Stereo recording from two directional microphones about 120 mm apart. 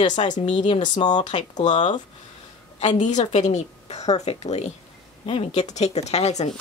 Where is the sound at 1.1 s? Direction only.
80° left.